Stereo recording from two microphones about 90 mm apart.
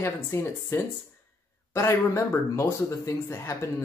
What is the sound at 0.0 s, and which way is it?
Speech, 30° left (ahead or behind).